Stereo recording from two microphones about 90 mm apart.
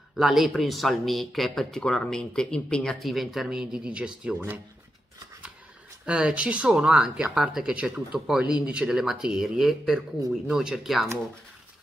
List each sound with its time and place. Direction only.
0.1 s speech: centre (ahead or behind)
6.0 s speech: 15° right (ahead or behind)